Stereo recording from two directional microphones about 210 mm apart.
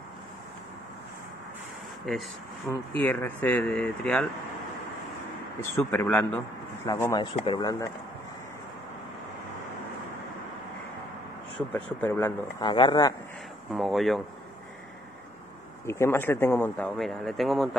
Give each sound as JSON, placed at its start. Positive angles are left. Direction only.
{"t": 2.7, "sound": "speech", "side_deg": -5}
{"t": 3.0, "sound": "speech", "side_deg": 10}
{"t": 5.6, "sound": "speech", "side_deg": 10}
{"t": 11.7, "sound": "speech", "side_deg": 10}
{"t": 13.7, "sound": "speech", "side_deg": 0}
{"t": 15.9, "sound": "speech", "side_deg": 10}